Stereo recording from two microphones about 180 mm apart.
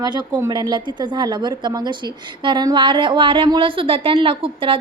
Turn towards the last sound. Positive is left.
turn(degrees=-30)  # may be behind; listen again after turning